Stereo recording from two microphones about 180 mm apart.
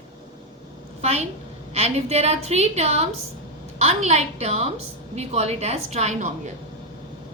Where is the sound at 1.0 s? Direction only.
35° right (ahead or behind).